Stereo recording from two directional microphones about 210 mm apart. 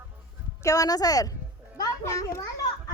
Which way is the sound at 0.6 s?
15° left (ahead or behind).